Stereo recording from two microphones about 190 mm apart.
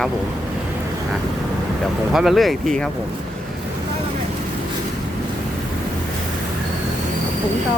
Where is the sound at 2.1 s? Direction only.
Centre (ahead or behind).